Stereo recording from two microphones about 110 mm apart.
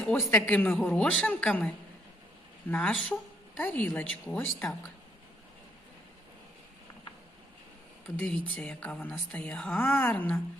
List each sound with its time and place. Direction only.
0.3 s speech: 20° left (ahead or behind)
8.2 s speech: 10° left (ahead or behind)